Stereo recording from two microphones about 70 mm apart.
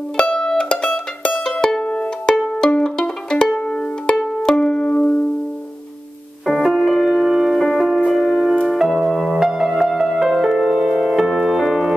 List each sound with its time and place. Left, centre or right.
0.2 s music: centre
4.9 s music: left
6.4 s music: centre